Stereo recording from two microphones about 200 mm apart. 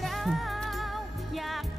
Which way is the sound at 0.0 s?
Centre (ahead or behind).